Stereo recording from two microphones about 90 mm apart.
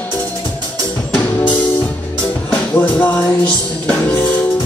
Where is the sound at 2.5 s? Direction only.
20° left (ahead or behind).